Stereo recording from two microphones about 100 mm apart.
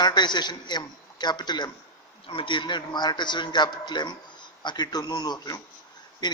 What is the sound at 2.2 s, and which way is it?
Speech, 65° left (ahead or behind).